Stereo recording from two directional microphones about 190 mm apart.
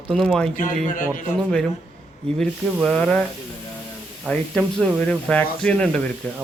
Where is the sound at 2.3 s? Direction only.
5° left (ahead or behind).